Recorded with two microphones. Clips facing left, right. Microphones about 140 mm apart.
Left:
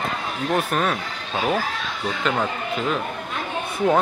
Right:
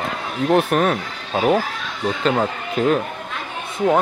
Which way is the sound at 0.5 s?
55° right (ahead or behind).